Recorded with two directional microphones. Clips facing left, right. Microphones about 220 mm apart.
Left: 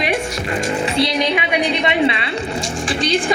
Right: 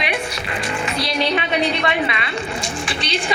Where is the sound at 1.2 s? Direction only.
15° left (ahead or behind).